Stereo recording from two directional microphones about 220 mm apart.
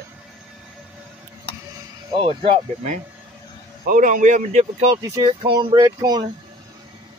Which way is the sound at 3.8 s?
40° right (ahead or behind).